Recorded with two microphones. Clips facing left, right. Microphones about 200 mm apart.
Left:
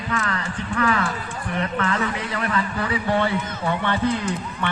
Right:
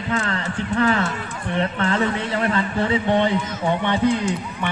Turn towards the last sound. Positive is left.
turn(degrees=-15)  # may be behind; listen again after turning